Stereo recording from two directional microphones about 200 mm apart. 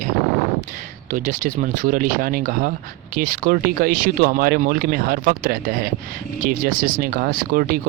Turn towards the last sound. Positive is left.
turn(degrees=-45)  # may be behind; listen again after turning